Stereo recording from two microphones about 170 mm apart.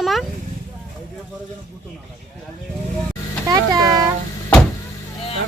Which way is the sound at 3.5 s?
20° right (ahead or behind).